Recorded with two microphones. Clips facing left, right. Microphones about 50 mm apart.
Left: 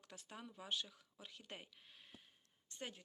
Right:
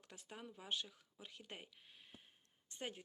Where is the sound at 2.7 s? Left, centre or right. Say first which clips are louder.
Right 2 dB; centre.